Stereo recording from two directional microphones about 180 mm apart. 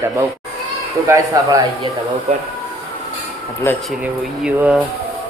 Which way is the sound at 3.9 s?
5° right (ahead or behind).